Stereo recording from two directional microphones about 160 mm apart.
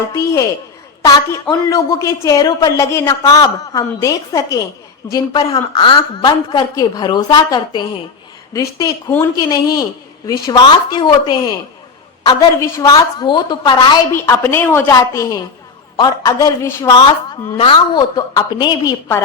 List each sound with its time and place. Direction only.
0.1 s a woman's voice: 20° left (ahead or behind)
14.1 s a woman's voice: 15° left (ahead or behind)
17.6 s a woman's voice: 30° left (ahead or behind)